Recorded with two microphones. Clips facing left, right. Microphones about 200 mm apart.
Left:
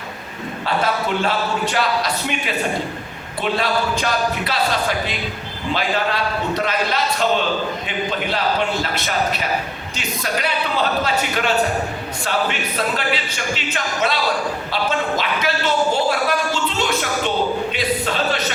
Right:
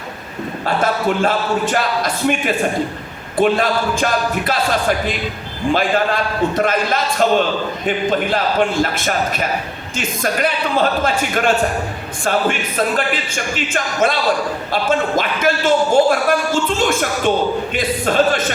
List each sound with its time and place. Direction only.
0.6 s speech: 50° right (ahead or behind)
3.3 s speech: 50° right (ahead or behind)
8.8 s speech: 50° right (ahead or behind)